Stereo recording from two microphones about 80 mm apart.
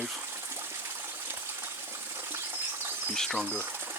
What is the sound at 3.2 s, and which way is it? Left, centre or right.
Speech, centre.